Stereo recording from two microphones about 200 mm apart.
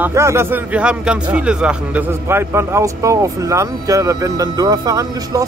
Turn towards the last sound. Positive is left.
turn(degrees=-20)  # may be behind; listen again after turning